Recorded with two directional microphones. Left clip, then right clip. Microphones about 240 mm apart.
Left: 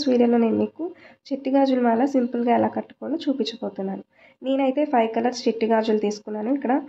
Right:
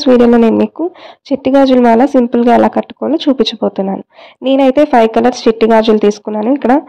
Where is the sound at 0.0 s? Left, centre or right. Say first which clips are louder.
Right 12 dB; right.